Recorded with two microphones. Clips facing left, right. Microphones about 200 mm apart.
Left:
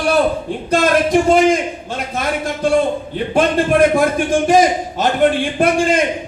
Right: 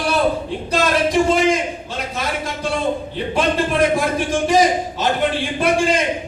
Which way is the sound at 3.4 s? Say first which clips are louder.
Left 5 dB; 50° left (ahead or behind).